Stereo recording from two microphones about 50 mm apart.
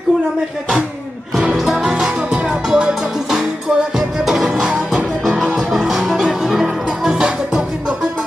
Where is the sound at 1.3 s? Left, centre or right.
Centre.